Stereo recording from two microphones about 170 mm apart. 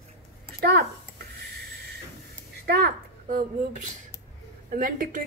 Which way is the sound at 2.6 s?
65° right (ahead or behind).